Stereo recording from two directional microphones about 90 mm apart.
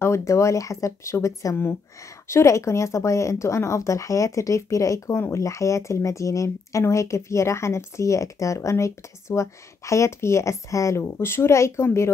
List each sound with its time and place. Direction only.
0.0 s speech: 30° left (ahead or behind)